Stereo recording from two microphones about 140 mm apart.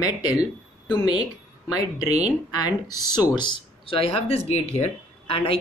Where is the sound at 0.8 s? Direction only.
30° left (ahead or behind).